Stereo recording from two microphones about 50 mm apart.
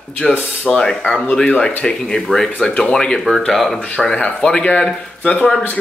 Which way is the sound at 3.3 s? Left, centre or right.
Centre.